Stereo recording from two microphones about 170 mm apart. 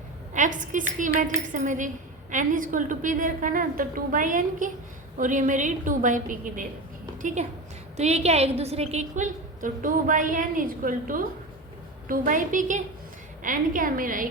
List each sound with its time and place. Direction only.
0.3 s a woman's voice: 50° right (ahead or behind)